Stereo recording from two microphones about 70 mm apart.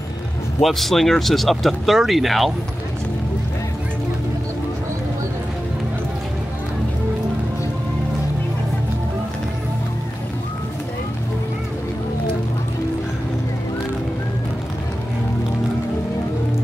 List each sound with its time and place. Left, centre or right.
0.6 s speech: centre